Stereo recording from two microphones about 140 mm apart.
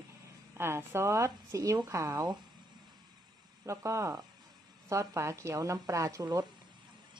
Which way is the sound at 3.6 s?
20° right (ahead or behind).